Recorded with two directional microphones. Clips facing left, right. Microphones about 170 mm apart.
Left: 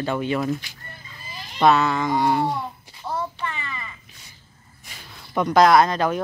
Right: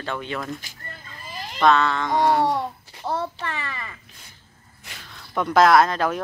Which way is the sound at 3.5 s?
65° right (ahead or behind).